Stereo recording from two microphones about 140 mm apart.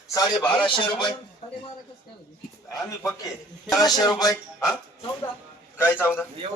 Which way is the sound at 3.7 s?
30° left (ahead or behind).